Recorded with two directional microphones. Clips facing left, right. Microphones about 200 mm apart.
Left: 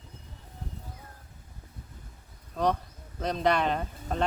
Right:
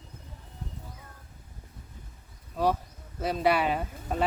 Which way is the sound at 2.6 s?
5° right (ahead or behind).